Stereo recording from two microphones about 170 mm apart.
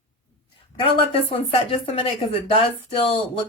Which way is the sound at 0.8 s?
30° left (ahead or behind).